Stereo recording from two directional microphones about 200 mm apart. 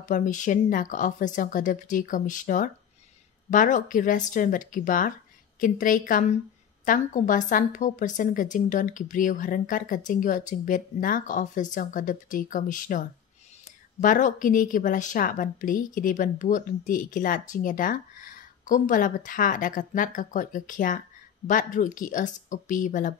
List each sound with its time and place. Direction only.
0.0 s a woman's voice: 40° left (ahead or behind)
14.0 s a woman's voice: 40° left (ahead or behind)